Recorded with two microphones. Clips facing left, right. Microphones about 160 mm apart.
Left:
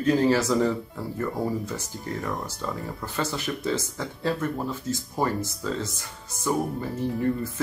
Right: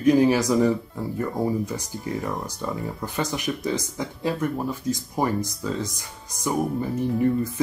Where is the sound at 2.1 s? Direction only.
Centre (ahead or behind).